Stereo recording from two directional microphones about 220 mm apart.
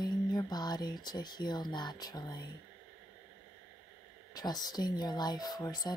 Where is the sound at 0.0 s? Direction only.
20° left (ahead or behind).